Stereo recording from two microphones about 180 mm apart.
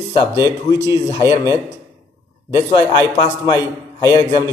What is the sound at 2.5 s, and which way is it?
A man's voice, 30° left (ahead or behind).